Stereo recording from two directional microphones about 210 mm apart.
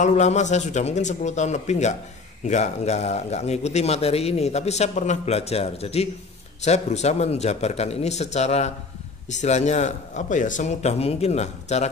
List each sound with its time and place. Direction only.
0.0 s a man's voice: 35° left (ahead or behind)